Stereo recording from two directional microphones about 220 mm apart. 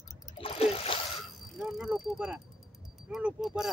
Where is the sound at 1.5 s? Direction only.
Centre (ahead or behind).